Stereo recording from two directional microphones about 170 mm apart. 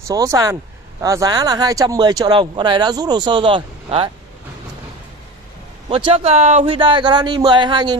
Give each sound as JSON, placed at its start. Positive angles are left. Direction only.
{"t": 0.0, "sound": "speech", "side_deg": -20}
{"t": 5.9, "sound": "speech", "side_deg": -30}